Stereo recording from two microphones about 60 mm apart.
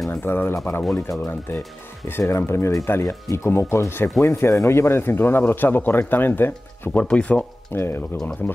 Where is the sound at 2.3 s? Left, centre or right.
Left.